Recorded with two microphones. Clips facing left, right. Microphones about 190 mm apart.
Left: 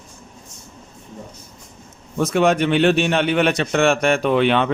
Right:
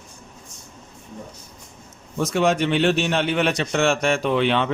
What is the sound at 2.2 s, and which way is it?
A man's voice, 60° left (ahead or behind).